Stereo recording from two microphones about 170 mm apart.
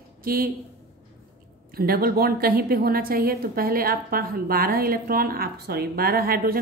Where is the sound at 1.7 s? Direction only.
60° right (ahead or behind).